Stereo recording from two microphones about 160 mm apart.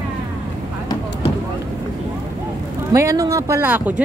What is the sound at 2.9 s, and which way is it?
Speech, 20° right (ahead or behind).